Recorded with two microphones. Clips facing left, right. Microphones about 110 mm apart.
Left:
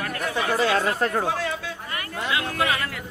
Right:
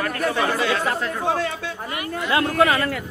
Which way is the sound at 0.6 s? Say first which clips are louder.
Left 1 dB; 45° left (ahead or behind).